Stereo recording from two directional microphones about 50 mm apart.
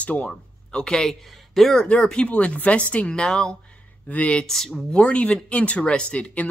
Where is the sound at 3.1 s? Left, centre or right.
Centre.